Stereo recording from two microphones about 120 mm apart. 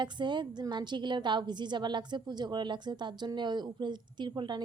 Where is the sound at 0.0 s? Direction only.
40° right (ahead or behind).